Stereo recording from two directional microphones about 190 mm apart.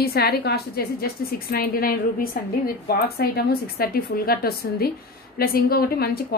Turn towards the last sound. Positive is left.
turn(degrees=55)  # may be behind; listen again after turning